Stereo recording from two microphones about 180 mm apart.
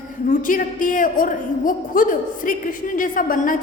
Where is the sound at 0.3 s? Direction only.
50° left (ahead or behind).